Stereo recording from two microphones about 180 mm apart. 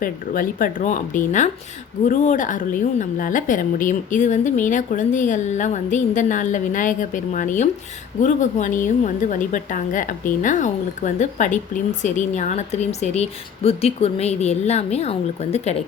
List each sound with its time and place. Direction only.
0.0 s a woman's voice: 50° left (ahead or behind); by 15.8 s 35° left (ahead or behind)